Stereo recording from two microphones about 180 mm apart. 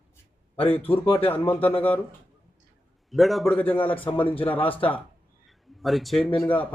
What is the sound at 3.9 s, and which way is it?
Speech, 30° left (ahead or behind).